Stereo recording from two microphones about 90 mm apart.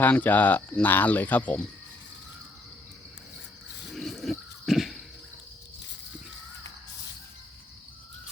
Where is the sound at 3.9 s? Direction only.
Centre (ahead or behind).